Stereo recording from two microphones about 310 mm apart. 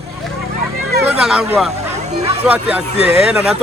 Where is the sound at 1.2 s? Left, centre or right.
Centre.